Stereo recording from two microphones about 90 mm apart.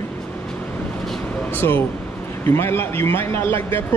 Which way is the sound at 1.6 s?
25° left (ahead or behind).